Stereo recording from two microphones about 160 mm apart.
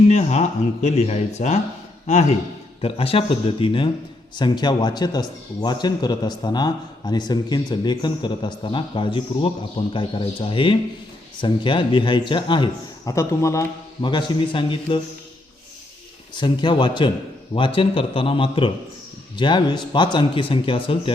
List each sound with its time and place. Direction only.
0.1 s speech: 45° left (ahead or behind)
2.8 s a man's voice: 35° left (ahead or behind)
13.1 s speech: 20° left (ahead or behind)
14.0 s a man's voice: 30° left (ahead or behind)
16.3 s a man's voice: 30° left (ahead or behind)